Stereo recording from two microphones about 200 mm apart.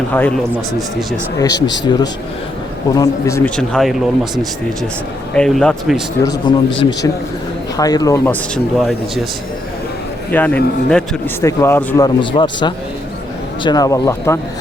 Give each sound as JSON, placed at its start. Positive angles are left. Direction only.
{"t": 0.1, "sound": "speech", "side_deg": 10}
{"t": 1.5, "sound": "a man's voice", "side_deg": 60}
{"t": 1.8, "sound": "a man's voice", "side_deg": 20}
{"t": 5.3, "sound": "speech", "side_deg": 5}
{"t": 6.3, "sound": "a man's voice", "side_deg": 65}
{"t": 7.8, "sound": "speech", "side_deg": 20}
{"t": 10.3, "sound": "speech", "side_deg": 5}
{"t": 12.0, "sound": "a man's voice", "side_deg": 25}